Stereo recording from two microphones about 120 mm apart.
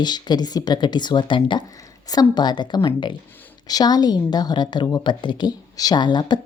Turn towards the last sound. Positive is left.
turn(degrees=40)  # may be behind; listen again after turning